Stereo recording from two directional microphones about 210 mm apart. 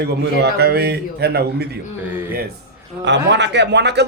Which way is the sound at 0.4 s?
50° right (ahead or behind).